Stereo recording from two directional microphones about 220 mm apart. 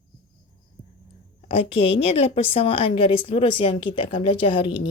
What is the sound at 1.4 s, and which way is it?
A woman's voice, 25° left (ahead or behind).